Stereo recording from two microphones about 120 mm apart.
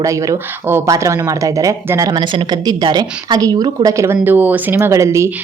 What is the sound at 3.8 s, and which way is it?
Speech, 25° right (ahead or behind).